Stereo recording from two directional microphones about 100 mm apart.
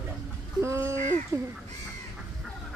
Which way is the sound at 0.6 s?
25° right (ahead or behind).